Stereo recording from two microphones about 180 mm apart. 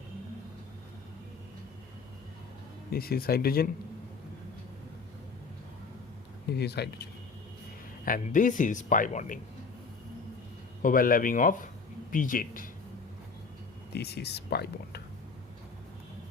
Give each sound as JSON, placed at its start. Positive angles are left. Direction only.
{"t": 2.9, "sound": "speech", "side_deg": 55}
{"t": 6.5, "sound": "speech", "side_deg": 65}
{"t": 8.0, "sound": "speech", "side_deg": 45}
{"t": 10.8, "sound": "speech", "side_deg": 50}
{"t": 13.9, "sound": "speech", "side_deg": 65}